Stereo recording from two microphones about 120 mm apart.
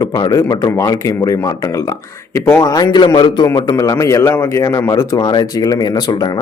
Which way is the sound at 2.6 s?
35° left (ahead or behind).